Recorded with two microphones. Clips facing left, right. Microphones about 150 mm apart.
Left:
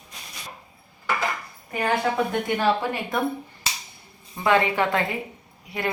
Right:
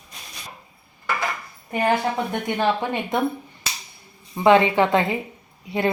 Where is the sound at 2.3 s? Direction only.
20° right (ahead or behind).